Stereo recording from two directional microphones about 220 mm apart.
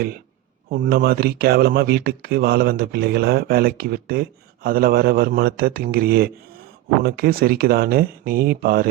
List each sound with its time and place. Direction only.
0.7 s speech: 45° right (ahead or behind)